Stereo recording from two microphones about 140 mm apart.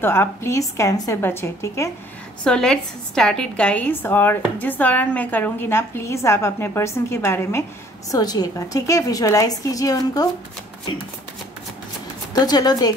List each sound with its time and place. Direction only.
0.0 s a woman's voice: 15° left (ahead or behind)
2.4 s a woman's voice: 5° left (ahead or behind); by 10.2 s 25° left (ahead or behind)
12.4 s a woman's voice: 30° left (ahead or behind)